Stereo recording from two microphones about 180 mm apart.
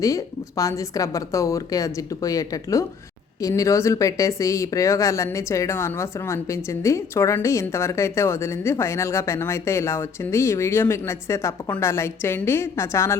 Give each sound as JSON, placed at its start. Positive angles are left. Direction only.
{"t": 0.0, "sound": "speech", "side_deg": 20}